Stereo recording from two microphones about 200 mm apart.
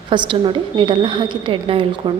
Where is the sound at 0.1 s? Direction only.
25° right (ahead or behind).